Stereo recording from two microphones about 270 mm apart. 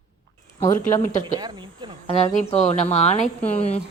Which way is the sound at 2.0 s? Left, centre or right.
Left.